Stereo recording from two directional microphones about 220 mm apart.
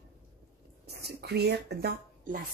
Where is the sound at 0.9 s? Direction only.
45° right (ahead or behind).